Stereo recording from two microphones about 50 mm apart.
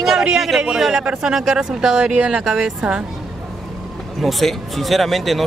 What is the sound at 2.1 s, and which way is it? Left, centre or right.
Speech, right.